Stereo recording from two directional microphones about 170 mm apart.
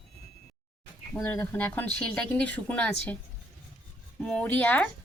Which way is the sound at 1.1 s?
10° left (ahead or behind).